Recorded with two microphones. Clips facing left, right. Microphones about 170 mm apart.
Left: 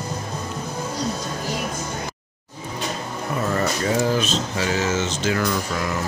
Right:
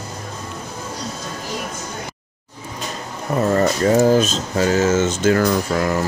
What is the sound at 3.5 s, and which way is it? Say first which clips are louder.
Speech: right 7 dB; 40° right (ahead or behind).